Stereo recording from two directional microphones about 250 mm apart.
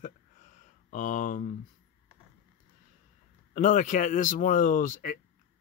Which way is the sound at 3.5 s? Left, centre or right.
Left.